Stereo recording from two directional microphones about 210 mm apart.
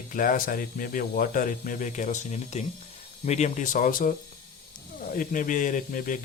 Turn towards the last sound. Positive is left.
turn(degrees=40)  # may be behind; listen again after turning